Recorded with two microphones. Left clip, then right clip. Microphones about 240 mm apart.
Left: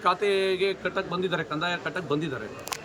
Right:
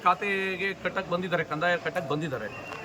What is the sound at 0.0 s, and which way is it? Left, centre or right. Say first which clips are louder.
A man's voice: left 1 dB; centre.